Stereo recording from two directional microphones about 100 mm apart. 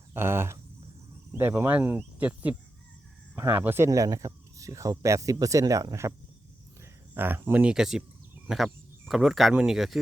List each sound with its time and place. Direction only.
0.1 s speech: 25° right (ahead or behind)
3.8 s speech: 35° right (ahead or behind)
7.1 s speech: 20° right (ahead or behind)
7.7 s speech: 5° right (ahead or behind)